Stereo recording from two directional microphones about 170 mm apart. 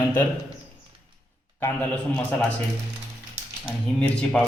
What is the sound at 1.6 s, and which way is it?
Speech, 10° left (ahead or behind).